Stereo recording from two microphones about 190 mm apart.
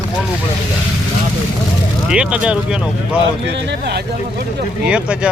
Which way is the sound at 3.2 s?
70° right (ahead or behind).